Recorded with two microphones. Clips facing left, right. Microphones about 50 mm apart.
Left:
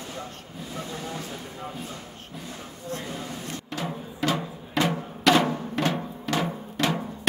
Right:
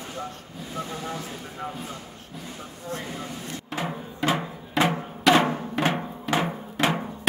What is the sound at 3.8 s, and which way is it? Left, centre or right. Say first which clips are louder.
Music: right 2 dB; right.